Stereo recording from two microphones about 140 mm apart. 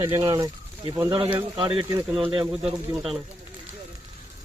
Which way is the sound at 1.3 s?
40° right (ahead or behind).